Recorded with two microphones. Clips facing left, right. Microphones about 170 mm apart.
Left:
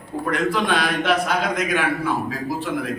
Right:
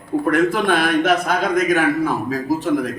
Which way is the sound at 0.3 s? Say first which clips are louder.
Right 4 dB; 50° right (ahead or behind).